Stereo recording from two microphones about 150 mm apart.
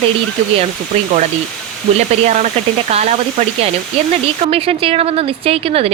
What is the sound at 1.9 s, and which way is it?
Speech, 50° right (ahead or behind).